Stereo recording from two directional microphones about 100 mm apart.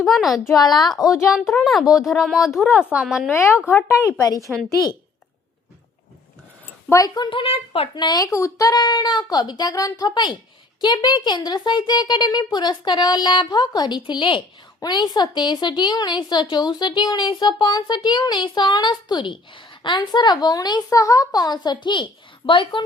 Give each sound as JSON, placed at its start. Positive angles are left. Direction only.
{"t": 0.0, "sound": "a woman's voice", "side_deg": 0}
{"t": 0.3, "sound": "a woman's voice", "side_deg": 35}
{"t": 1.3, "sound": "a woman's voice", "side_deg": 0}
{"t": 3.2, "sound": "speech", "side_deg": 25}
{"t": 6.9, "sound": "a woman's voice", "side_deg": 35}
{"t": 7.3, "sound": "a woman's voice", "side_deg": 65}
{"t": 7.9, "sound": "a woman's voice", "side_deg": 50}
{"t": 8.2, "sound": "a woman's voice", "side_deg": 30}